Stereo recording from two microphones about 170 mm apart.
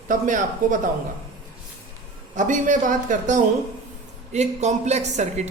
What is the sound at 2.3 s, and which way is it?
Speech, 50° right (ahead or behind).